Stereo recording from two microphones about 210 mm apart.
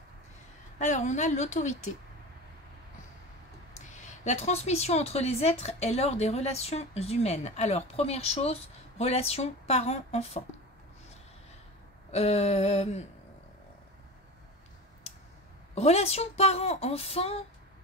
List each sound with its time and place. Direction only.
0.7 s a woman's voice: 35° left (ahead or behind)
3.9 s a woman's voice: 35° left (ahead or behind)
12.1 s a woman's voice: 30° left (ahead or behind)
15.7 s a woman's voice: 30° left (ahead or behind)